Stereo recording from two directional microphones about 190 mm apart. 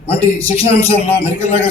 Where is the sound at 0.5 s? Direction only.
30° left (ahead or behind).